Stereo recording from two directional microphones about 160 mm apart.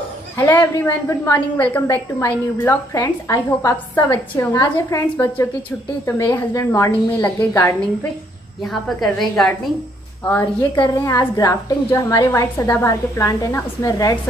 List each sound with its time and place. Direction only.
0.4 s a woman's voice: 10° left (ahead or behind)
8.6 s a woman's voice: centre (ahead or behind); by 14.1 s 20° left (ahead or behind)